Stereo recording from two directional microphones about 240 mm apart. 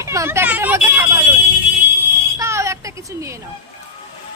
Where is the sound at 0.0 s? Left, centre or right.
Centre.